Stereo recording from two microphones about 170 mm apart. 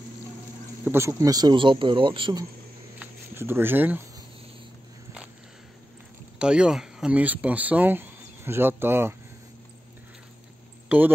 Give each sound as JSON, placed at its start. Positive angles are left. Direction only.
{"t": 0.8, "sound": "speech", "side_deg": -15}
{"t": 3.0, "sound": "a sound", "side_deg": -15}
{"t": 6.3, "sound": "speech", "side_deg": -5}
{"t": 10.9, "sound": "speech", "side_deg": -10}